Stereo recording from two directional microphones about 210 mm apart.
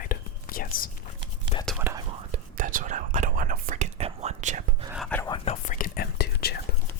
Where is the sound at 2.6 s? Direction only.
40° right (ahead or behind).